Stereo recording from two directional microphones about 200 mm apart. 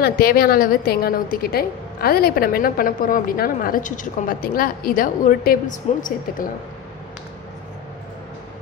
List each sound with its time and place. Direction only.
0.0 s a woman's voice: 50° left (ahead or behind)